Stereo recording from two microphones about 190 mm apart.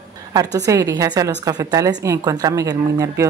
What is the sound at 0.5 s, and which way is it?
A woman's voice, 20° right (ahead or behind).